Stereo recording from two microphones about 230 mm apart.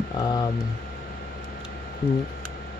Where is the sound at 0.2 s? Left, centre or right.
Centre.